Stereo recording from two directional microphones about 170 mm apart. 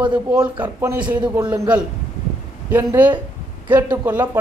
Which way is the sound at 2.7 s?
10° right (ahead or behind).